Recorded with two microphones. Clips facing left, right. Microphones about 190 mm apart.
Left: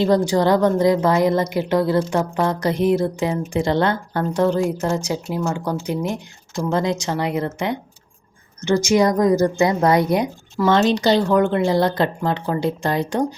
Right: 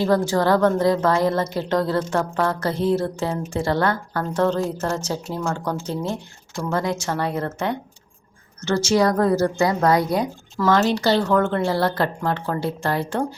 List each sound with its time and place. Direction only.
0.0 s a woman's voice: 15° left (ahead or behind)